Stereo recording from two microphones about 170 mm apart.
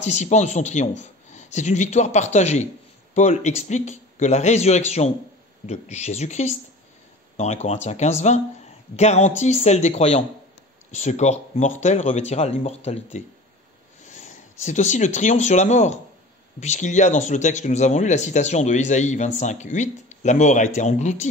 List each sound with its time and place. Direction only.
0.0 s speech: 40° left (ahead or behind)